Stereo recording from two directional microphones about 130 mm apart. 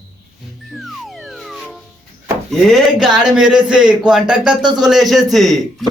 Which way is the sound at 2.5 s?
Centre (ahead or behind).